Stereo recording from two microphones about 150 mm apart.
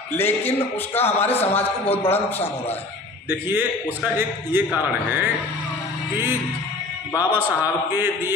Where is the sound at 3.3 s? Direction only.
15° right (ahead or behind).